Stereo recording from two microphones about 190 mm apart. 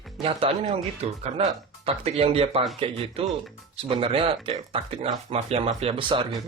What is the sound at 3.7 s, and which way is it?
Speech, 30° right (ahead or behind).